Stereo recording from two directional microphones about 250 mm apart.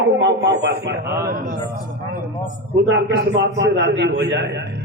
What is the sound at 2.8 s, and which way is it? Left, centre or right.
A man's voice, right.